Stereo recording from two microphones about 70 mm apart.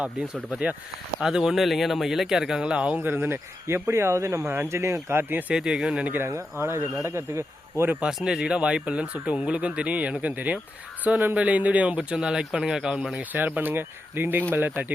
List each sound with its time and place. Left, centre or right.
1.2 s speech: centre
3.0 s speech: right
5.5 s speech: centre
6.2 s speech: right
8.0 s speech: centre
12.1 s speech: centre
13.3 s speech: right